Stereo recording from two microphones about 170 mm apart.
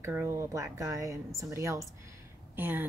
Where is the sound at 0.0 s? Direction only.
15° right (ahead or behind).